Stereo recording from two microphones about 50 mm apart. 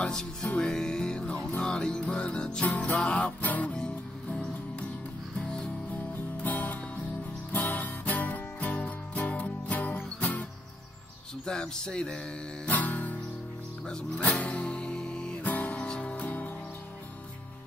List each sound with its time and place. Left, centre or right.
0.0 s music: centre
2.6 s music: left
3.7 s music: centre
6.4 s music: left
11.4 s speech: centre
12.6 s music: left
13.8 s speech: centre
14.4 s music: left
15.4 s music: left